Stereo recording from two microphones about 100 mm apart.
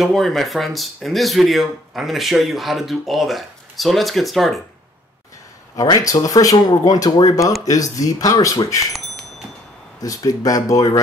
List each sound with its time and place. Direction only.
0.0 s speech: centre (ahead or behind)
5.8 s speech: 35° left (ahead or behind)
8.9 s a sound: centre (ahead or behind)
10.0 s speech: 35° left (ahead or behind)